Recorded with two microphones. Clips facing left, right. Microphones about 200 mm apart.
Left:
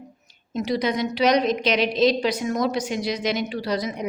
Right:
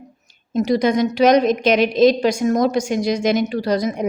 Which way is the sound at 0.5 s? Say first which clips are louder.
Right 7 dB; 45° right (ahead or behind).